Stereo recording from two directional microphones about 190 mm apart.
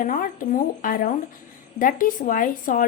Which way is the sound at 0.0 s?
45° left (ahead or behind).